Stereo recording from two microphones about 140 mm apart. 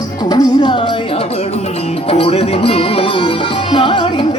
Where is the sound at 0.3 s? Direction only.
30° left (ahead or behind).